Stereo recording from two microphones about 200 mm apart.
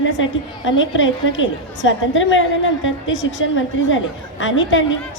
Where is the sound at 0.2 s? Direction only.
70° left (ahead or behind).